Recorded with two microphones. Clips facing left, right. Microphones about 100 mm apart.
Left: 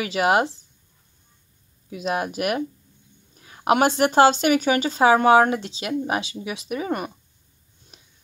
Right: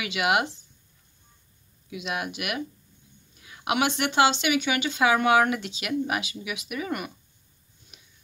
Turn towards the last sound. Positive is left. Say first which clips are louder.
# left 5 dB
turn(degrees=35)  # may be behind; listen again after turning